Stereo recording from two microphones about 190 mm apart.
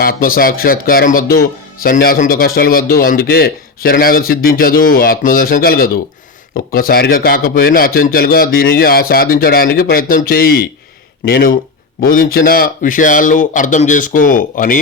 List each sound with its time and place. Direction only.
0.0 s speech: 50° left (ahead or behind)